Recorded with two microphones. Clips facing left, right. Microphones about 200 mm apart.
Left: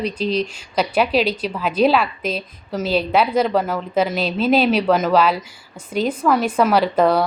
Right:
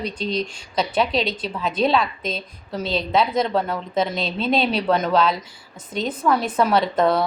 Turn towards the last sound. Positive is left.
turn(degrees=5)  # may be behind; listen again after turning